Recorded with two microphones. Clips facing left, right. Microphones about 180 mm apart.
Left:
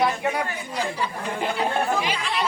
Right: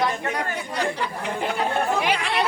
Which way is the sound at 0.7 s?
65° right (ahead or behind).